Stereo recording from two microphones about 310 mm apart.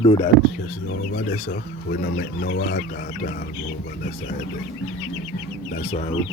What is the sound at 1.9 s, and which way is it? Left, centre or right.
Speech, left.